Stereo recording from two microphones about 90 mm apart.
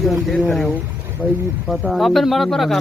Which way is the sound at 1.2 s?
15° right (ahead or behind).